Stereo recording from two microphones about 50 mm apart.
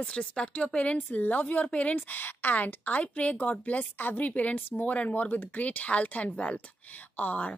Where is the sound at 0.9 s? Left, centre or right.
Left.